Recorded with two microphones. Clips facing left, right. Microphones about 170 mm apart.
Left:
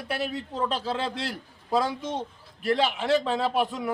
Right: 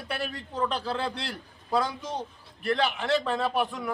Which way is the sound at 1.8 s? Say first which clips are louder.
Left 2 dB; 5° left (ahead or behind).